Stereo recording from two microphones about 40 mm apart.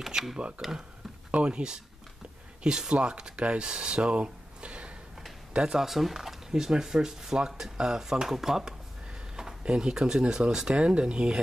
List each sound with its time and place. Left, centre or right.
0.0 s speech: centre
0.6 s speech: right
2.9 s speech: right
5.8 s speech: centre
9.4 s a sound: centre
9.9 s speech: centre
10.7 s speech: right